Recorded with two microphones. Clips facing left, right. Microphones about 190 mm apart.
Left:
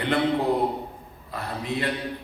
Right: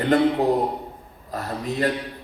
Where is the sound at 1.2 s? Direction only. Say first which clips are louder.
Right 3 dB; 40° right (ahead or behind).